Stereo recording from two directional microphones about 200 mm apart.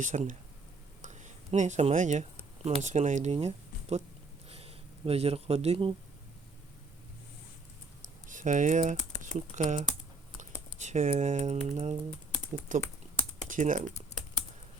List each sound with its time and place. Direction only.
0.0 s speech: 40° right (ahead or behind)
4.4 s a sound: 30° right (ahead or behind)
8.3 s speech: 40° right (ahead or behind)